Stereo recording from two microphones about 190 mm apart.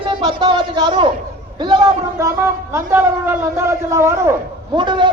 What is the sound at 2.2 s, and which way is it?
A man's voice, 15° right (ahead or behind).